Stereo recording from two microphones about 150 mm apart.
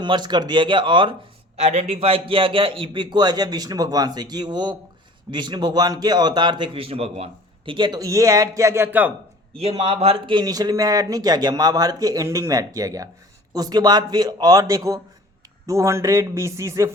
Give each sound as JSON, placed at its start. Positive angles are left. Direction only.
{"t": 0.0, "sound": "speech", "side_deg": -30}
{"t": 1.6, "sound": "a man's voice", "side_deg": -45}
{"t": 9.6, "sound": "a man's voice", "side_deg": -45}